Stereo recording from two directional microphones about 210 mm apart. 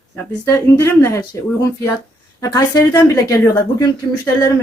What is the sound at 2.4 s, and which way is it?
A woman's voice, 15° left (ahead or behind).